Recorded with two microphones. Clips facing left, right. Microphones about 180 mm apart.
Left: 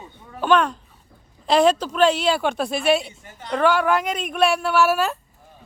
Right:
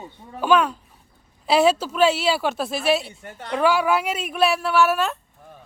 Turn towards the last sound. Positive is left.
turn(degrees=0)  # may be behind; listen again after turning